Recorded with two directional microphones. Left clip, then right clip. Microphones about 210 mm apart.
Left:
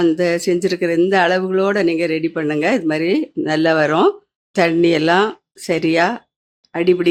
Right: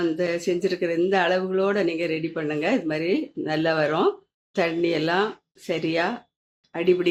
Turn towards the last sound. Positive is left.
turn(degrees=20)  # may be behind; listen again after turning